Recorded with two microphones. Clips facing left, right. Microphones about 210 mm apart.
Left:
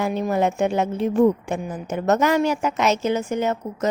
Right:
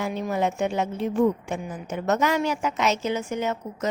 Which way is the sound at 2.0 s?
45° left (ahead or behind).